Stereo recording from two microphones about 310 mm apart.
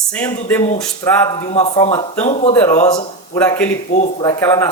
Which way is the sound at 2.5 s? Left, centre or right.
Centre.